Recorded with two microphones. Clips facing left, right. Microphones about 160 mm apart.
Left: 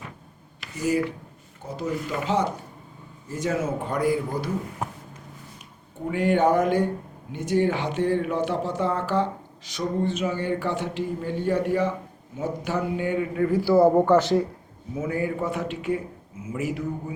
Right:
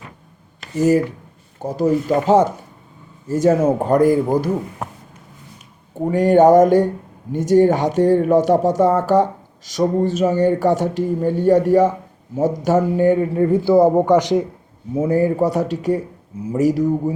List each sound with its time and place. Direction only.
0.8 s a man's voice: 45° right (ahead or behind)
6.1 s a man's voice: 40° right (ahead or behind); by 14.4 s 15° right (ahead or behind)
14.9 s a man's voice: 35° right (ahead or behind)